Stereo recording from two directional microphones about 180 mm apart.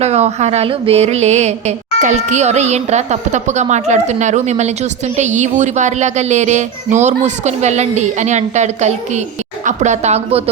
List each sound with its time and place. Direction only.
0.0 s mantra: 35° right (ahead or behind)